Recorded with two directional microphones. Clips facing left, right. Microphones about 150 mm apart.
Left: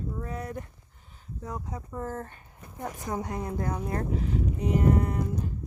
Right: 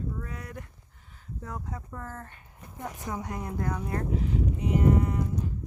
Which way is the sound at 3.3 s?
25° left (ahead or behind).